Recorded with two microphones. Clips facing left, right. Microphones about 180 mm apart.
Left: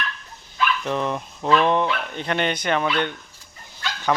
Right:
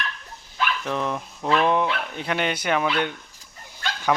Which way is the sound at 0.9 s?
Centre (ahead or behind).